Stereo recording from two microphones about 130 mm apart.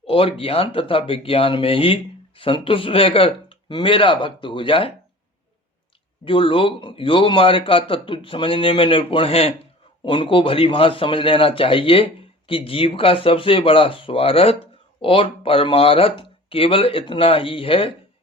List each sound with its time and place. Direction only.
0.1 s a man's voice: 45° left (ahead or behind)
6.2 s a man's voice: 40° left (ahead or behind)